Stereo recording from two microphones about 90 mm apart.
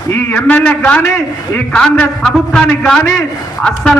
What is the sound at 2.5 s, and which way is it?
A man's voice, 10° left (ahead or behind).